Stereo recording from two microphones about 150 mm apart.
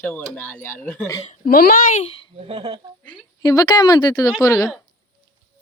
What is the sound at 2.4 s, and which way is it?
Speech, 35° right (ahead or behind).